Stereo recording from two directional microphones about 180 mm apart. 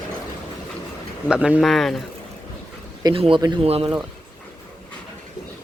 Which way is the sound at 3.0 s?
30° right (ahead or behind).